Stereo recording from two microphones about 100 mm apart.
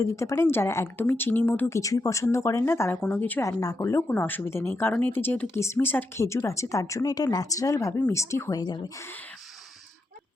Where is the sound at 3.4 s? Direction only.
35° left (ahead or behind).